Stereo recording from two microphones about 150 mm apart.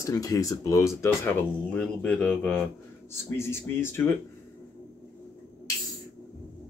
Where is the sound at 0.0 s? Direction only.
20° left (ahead or behind).